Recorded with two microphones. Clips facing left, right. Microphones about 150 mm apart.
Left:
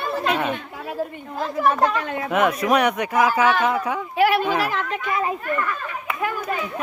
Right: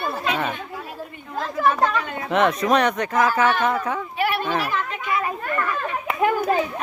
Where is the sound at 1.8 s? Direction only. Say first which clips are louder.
Left 1 dB; 5° left (ahead or behind).